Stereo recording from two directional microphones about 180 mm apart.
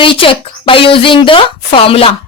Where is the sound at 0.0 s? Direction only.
30° left (ahead or behind).